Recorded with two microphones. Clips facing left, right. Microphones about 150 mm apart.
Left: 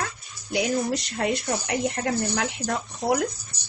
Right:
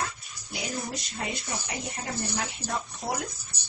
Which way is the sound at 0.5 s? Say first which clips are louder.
Left 10 dB; 70° left (ahead or behind).